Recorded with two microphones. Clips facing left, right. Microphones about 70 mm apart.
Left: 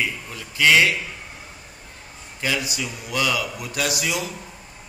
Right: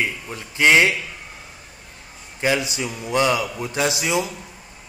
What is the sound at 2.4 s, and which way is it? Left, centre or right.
A man's voice, right.